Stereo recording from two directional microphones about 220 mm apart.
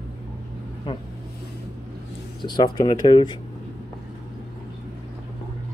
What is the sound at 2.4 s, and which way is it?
Speech, 20° left (ahead or behind).